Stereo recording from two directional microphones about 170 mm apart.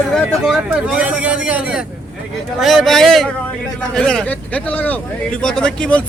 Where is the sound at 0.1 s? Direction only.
Centre (ahead or behind).